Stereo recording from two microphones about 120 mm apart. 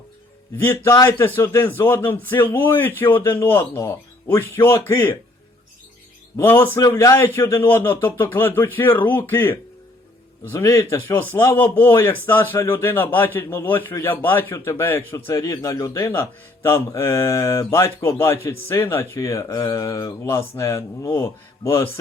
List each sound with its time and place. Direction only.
1.4 s a man's voice: 20° left (ahead or behind)
6.3 s a man's voice: 20° left (ahead or behind)